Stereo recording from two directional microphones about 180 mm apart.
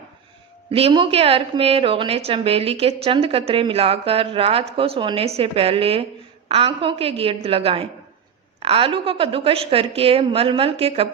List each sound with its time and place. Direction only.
0.7 s a woman's voice: 30° right (ahead or behind)